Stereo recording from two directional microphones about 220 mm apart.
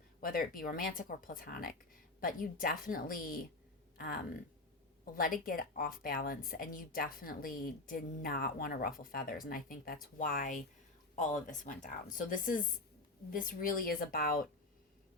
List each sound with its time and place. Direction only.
0.2 s a woman's voice: 40° left (ahead or behind)